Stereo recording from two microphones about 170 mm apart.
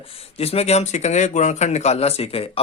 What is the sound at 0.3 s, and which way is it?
Speech, 35° left (ahead or behind).